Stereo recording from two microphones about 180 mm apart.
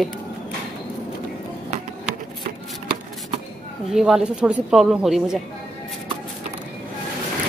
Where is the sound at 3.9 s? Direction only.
Centre (ahead or behind).